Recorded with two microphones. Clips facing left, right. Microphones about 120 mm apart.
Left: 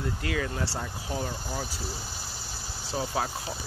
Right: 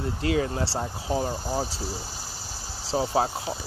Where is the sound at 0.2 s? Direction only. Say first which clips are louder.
Right 9 dB; 30° right (ahead or behind).